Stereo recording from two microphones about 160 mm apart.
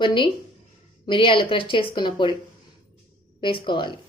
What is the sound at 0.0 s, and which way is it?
A woman's voice, 30° left (ahead or behind).